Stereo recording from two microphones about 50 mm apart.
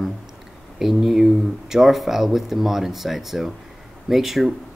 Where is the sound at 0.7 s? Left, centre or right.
Centre.